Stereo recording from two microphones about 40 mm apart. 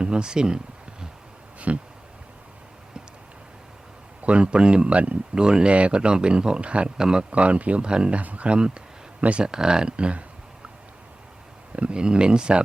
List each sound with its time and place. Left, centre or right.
0.0 s a sound: right
1.5 s a sound: right
4.2 s speech: right
5.3 s speech: right
6.9 s speech: centre
8.1 s speech: right
8.5 s speech: right
11.8 s speech: right